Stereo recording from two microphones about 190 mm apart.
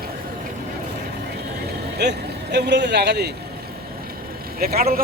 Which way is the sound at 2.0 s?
60° right (ahead or behind).